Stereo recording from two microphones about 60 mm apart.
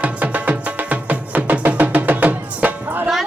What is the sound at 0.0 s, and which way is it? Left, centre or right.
Music, right.